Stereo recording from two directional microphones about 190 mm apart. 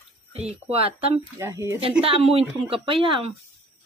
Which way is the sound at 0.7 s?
30° right (ahead or behind).